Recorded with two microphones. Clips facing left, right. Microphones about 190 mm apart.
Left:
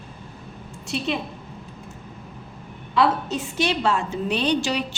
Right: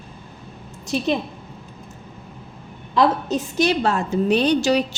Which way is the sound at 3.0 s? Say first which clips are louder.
Right 2 dB; 40° right (ahead or behind).